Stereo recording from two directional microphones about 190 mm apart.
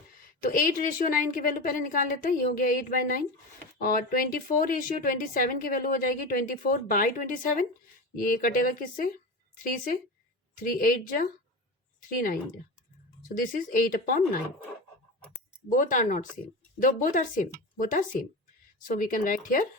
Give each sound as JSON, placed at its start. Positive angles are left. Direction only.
{"t": 0.4, "sound": "a woman's voice", "side_deg": 45}
{"t": 10.6, "sound": "a woman's voice", "side_deg": 50}
{"t": 13.2, "sound": "a woman's voice", "side_deg": 45}
{"t": 15.7, "sound": "a woman's voice", "side_deg": 45}